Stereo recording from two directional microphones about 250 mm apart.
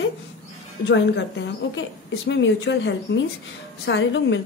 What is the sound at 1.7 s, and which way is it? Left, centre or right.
A woman's voice, left.